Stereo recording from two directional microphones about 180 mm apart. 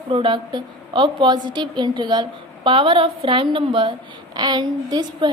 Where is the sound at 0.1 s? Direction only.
30° right (ahead or behind).